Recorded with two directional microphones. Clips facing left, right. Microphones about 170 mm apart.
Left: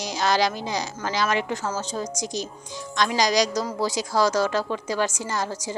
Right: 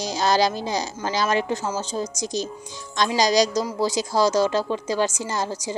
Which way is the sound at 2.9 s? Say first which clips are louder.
Right 2 dB; 30° right (ahead or behind).